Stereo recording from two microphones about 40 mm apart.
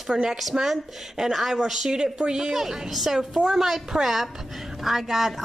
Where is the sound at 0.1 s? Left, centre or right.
Centre.